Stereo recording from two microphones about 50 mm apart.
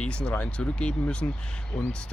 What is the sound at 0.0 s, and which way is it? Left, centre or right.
Speech, left.